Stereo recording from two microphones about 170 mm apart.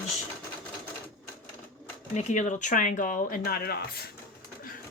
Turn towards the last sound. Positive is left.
turn(degrees=65)  # may be behind; listen again after turning